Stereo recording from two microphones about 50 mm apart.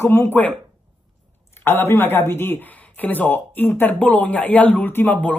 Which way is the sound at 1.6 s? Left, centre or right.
Left.